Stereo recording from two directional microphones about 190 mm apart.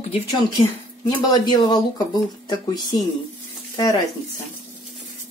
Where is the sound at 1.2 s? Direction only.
25° left (ahead or behind).